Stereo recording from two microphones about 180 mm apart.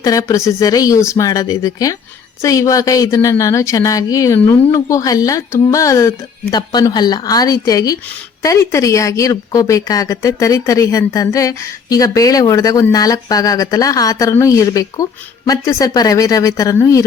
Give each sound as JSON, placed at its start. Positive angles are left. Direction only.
{"t": 0.0, "sound": "speech", "side_deg": 20}